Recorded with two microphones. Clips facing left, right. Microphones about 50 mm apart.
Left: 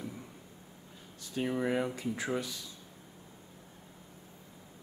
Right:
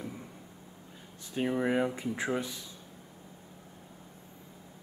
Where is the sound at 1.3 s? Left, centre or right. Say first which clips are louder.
Right 2 dB; right.